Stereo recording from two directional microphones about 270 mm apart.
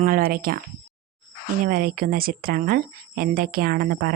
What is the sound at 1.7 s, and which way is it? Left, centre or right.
Speech, right.